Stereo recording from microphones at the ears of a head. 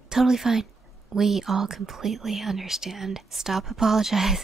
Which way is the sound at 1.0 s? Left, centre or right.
Right.